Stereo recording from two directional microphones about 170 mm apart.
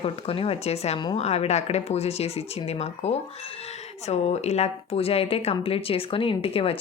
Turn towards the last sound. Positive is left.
turn(degrees=35)  # may be behind; listen again after turning